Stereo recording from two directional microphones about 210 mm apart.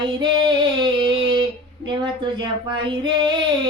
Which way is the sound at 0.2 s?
25° right (ahead or behind).